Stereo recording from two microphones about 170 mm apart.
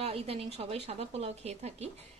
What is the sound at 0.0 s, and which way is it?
A woman's voice, 35° right (ahead or behind).